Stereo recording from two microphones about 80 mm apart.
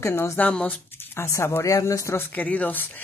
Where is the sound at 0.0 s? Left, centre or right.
Left.